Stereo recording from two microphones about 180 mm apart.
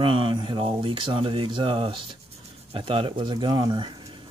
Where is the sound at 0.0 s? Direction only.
30° right (ahead or behind).